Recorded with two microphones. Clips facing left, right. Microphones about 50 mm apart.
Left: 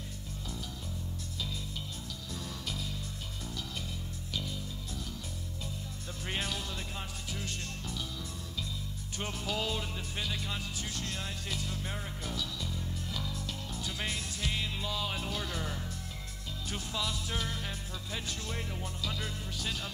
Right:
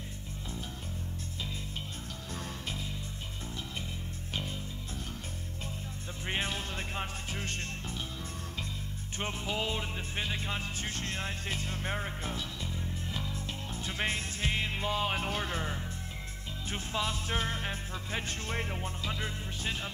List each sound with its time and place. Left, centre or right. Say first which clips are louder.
2.3 s music: right 1 dB; right
4.3 s music: right 1 dB; right
6.2 s music: right 2 dB; right
9.2 s music: right 1 dB; right